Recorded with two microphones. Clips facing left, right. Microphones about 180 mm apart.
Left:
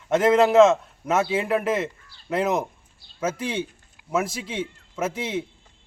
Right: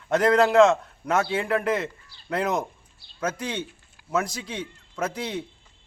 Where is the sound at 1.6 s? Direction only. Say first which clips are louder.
Left 1 dB; 25° left (ahead or behind).